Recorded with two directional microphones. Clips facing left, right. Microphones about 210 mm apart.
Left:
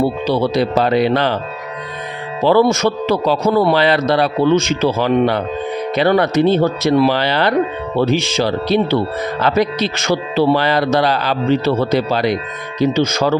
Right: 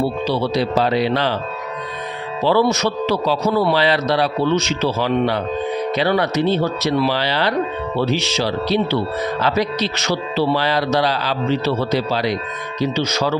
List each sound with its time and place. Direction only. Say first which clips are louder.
0.3 s speech: left 4 dB; 50° left (ahead or behind)
2.4 s speech: left 4 dB; 50° left (ahead or behind)